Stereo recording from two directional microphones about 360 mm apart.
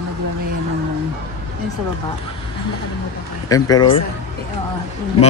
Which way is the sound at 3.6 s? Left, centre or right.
Centre.